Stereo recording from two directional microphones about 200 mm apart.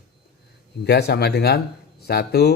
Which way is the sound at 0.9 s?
55° left (ahead or behind).